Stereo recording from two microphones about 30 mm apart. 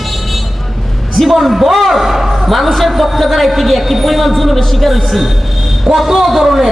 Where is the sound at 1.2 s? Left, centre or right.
Centre.